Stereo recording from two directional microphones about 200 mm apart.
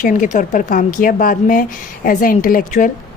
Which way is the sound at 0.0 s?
40° left (ahead or behind).